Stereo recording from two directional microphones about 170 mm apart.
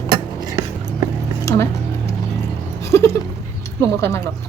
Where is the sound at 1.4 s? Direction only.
15° left (ahead or behind).